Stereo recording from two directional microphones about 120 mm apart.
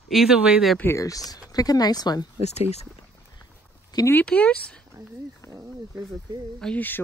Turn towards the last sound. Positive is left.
turn(degrees=15)  # may be behind; listen again after turning